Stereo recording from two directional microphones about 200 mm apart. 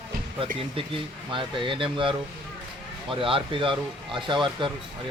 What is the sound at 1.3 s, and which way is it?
Speech, 25° right (ahead or behind).